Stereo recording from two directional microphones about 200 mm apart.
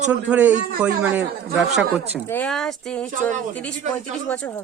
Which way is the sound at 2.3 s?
5° left (ahead or behind).